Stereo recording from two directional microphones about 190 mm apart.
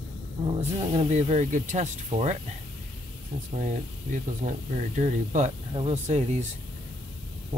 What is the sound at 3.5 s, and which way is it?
Speech, 40° right (ahead or behind).